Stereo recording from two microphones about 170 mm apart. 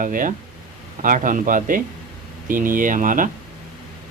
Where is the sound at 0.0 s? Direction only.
50° right (ahead or behind).